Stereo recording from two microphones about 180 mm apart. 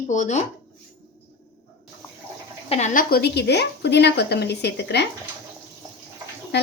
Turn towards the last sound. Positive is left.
turn(degrees=70)  # may be behind; listen again after turning